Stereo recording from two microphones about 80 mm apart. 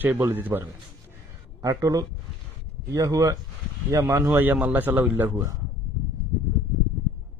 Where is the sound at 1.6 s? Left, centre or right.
Right.